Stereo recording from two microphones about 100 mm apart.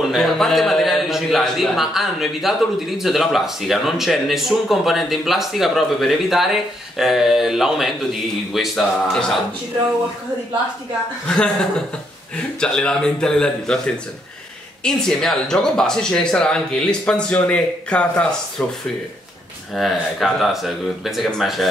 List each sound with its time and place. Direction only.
0.0 s a man's voice: centre (ahead or behind)
11.2 s speech: 10° left (ahead or behind)
12.5 s speech: 10° left (ahead or behind)
14.8 s speech: 5° left (ahead or behind)
19.7 s a man's voice: centre (ahead or behind)